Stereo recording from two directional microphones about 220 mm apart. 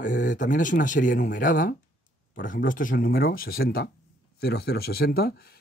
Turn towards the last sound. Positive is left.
turn(degrees=45)  # may be behind; listen again after turning